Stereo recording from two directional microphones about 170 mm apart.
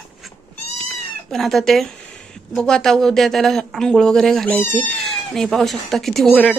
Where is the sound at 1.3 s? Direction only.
Centre (ahead or behind).